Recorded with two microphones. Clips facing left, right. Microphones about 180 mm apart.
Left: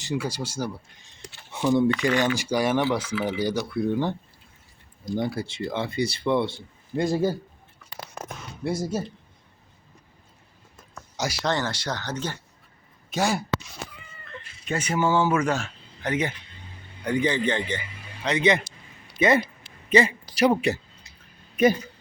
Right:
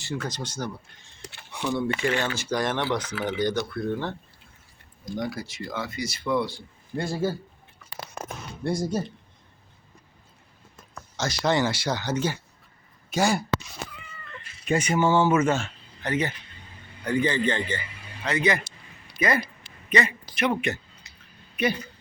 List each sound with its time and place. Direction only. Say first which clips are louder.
0.0 s speech: left 3 dB; 10° left (ahead or behind)
1.5 s a sound: left 6 dB; 20° left (ahead or behind)
1.9 s speech: left 3 dB; 25° right (ahead or behind)
2.1 s speech: left 4 dB; 15° left (ahead or behind)
5.1 s speech: left 4 dB; 30° left (ahead or behind)
8.6 s speech: right 1 dB; 5° left (ahead or behind)
11.4 s speech: right 4 dB; 10° right (ahead or behind)
14.9 s speech: right 1 dB; 5° left (ahead or behind)
16.0 s a man's voice: left 1 dB; 10° left (ahead or behind); by 20.8 s 35° left (ahead or behind)
21.5 s a sound: left 6 dB; 45° left (ahead or behind)